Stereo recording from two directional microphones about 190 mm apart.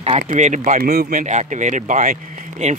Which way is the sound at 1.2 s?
40° right (ahead or behind).